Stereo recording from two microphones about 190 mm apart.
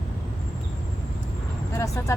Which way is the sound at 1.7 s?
15° left (ahead or behind).